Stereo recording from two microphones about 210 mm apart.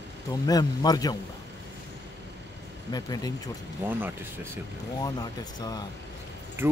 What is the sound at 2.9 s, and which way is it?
Speech, 20° left (ahead or behind).